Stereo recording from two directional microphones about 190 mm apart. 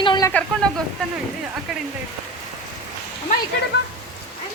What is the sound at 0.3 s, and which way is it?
Speech, 5° left (ahead or behind).